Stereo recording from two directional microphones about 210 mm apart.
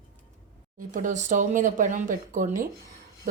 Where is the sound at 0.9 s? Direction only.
35° right (ahead or behind).